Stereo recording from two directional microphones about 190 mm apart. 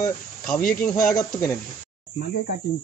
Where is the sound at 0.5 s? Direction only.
45° left (ahead or behind).